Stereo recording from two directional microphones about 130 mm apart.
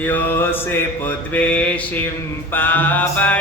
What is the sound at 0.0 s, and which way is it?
Mantra, 15° left (ahead or behind).